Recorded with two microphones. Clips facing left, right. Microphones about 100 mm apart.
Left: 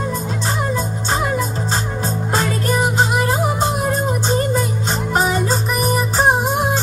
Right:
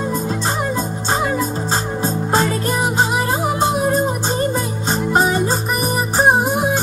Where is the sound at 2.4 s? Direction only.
Centre (ahead or behind).